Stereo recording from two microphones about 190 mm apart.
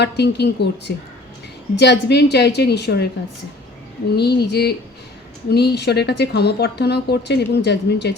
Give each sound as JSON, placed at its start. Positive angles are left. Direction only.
{"t": 0.0, "sound": "speech", "side_deg": 60}
{"t": 4.1, "sound": "speech", "side_deg": 60}